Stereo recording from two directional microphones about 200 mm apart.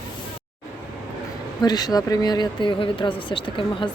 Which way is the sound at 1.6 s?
20° left (ahead or behind).